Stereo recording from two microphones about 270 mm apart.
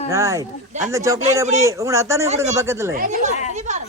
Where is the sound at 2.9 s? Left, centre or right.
Right.